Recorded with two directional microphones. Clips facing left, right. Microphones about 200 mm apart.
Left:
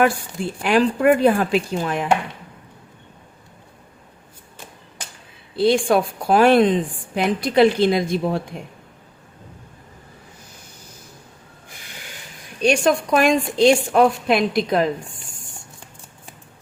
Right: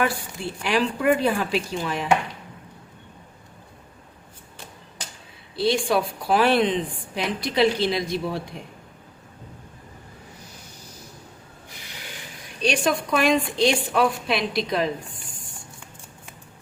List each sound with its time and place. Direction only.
0.6 s a woman's voice: 50° left (ahead or behind)
5.5 s a woman's voice: 50° left (ahead or behind)
12.6 s a woman's voice: 45° left (ahead or behind)